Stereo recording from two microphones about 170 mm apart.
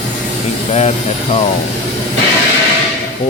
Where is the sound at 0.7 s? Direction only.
40° left (ahead or behind).